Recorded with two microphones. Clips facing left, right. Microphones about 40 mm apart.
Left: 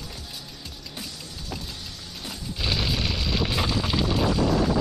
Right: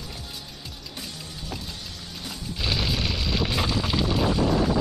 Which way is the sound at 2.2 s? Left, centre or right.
Centre.